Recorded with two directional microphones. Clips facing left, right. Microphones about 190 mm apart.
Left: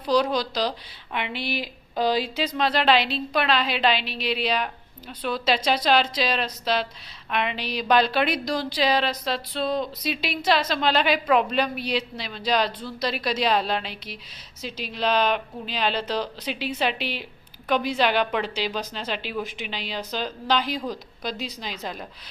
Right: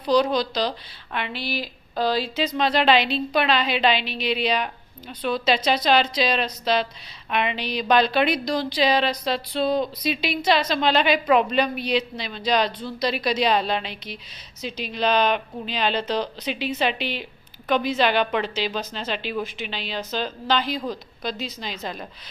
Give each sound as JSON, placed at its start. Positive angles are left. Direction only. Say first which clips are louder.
{"t": 0.0, "sound": "a woman's voice", "louder": "right 2 dB", "side_deg": 5}
{"t": 2.6, "sound": "a woman's voice", "louder": "right 2 dB", "side_deg": 5}